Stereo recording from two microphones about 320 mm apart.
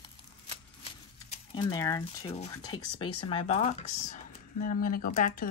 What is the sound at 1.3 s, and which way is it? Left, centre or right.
Speech, centre.